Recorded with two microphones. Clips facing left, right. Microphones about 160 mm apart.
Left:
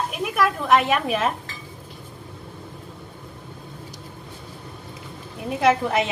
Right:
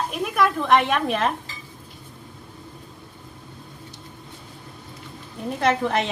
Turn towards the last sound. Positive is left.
turn(degrees=5)  # may be behind; listen again after turning